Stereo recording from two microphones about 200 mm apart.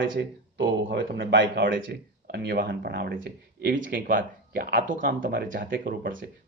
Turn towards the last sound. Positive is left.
turn(degrees=-45)  # may be behind; listen again after turning